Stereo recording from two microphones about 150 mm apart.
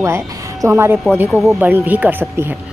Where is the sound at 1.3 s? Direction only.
Centre (ahead or behind).